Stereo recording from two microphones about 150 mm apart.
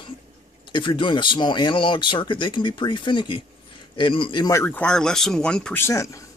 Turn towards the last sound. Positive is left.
turn(degrees=20)  # may be behind; listen again after turning